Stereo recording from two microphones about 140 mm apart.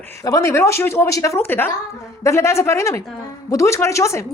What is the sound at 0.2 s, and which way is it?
Speech, 20° left (ahead or behind).